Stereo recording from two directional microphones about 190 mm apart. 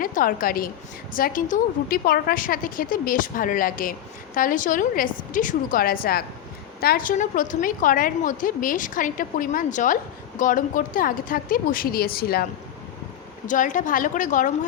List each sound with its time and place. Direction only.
0.0 s a woman's voice: 45° left (ahead or behind)
13.5 s a woman's voice: 40° left (ahead or behind)